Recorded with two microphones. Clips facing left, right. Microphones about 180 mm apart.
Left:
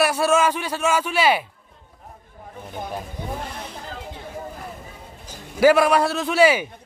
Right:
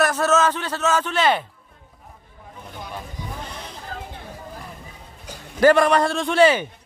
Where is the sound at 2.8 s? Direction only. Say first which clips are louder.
Left 5 dB; 50° left (ahead or behind).